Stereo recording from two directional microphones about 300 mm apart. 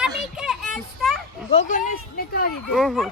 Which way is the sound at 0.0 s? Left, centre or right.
Centre.